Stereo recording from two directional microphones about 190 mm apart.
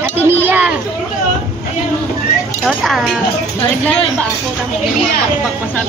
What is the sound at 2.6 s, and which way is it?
Speech, centre (ahead or behind).